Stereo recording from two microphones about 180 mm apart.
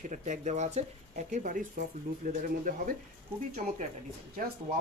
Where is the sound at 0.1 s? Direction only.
40° right (ahead or behind).